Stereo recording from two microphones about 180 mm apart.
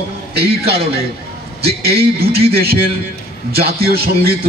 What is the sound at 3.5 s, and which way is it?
Speech, 60° right (ahead or behind).